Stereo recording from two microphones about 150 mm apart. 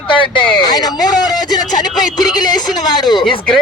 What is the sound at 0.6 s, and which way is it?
Speech, 25° left (ahead or behind).